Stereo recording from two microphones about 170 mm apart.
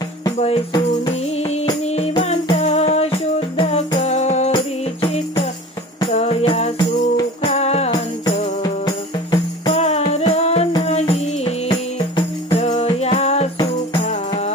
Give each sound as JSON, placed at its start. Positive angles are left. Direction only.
{"t": 0.4, "sound": "music", "side_deg": 35}
{"t": 8.6, "sound": "music", "side_deg": 25}
{"t": 9.7, "sound": "music", "side_deg": 40}